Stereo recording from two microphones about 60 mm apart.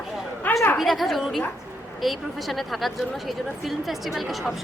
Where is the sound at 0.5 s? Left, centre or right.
Left.